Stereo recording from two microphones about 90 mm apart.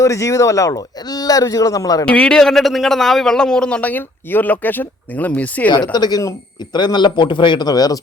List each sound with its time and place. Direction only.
0.0 s speech: 35° left (ahead or behind)
2.0 s a man's voice: 10° left (ahead or behind)
5.7 s speech: 50° left (ahead or behind)
6.7 s a man's voice: 55° left (ahead or behind)